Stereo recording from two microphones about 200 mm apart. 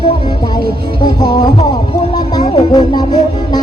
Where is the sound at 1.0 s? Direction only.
20° left (ahead or behind).